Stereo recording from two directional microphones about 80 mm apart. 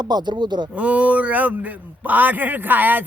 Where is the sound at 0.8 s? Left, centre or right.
Centre.